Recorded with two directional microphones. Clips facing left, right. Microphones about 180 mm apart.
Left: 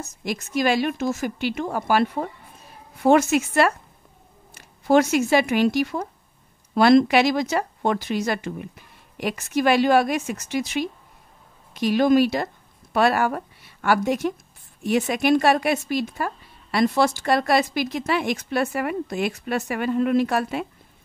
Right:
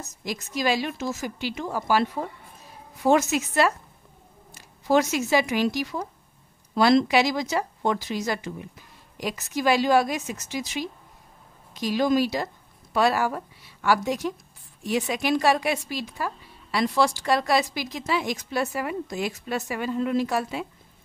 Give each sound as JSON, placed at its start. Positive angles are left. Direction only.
{"t": 0.2, "sound": "a woman's voice", "side_deg": 55}